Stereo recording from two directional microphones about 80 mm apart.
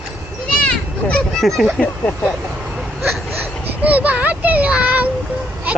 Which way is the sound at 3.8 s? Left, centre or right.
Centre.